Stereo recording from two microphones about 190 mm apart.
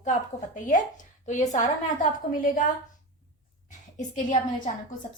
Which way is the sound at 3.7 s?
40° left (ahead or behind).